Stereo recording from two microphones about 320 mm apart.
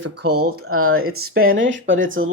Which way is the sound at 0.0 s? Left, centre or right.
Right.